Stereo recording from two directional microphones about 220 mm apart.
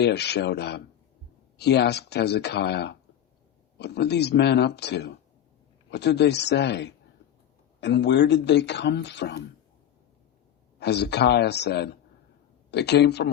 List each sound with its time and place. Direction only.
0.0 s speech: 50° left (ahead or behind)
10.8 s speech: 50° left (ahead or behind)